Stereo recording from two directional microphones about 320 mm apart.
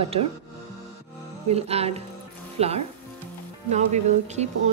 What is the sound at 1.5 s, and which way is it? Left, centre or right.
Speech, centre.